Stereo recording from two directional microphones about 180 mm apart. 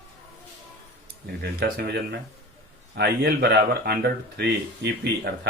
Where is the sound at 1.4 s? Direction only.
65° right (ahead or behind).